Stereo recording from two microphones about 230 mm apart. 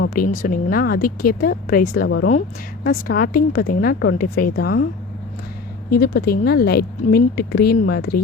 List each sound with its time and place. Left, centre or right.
0.0 s speech: left
2.0 s speech: left
2.8 s speech: left
5.9 s speech: left